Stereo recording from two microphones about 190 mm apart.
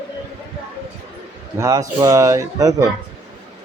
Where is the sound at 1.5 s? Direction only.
15° right (ahead or behind).